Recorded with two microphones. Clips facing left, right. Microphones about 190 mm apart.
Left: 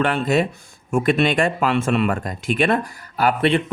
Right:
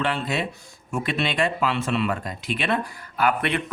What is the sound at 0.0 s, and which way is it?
Speech, 45° left (ahead or behind).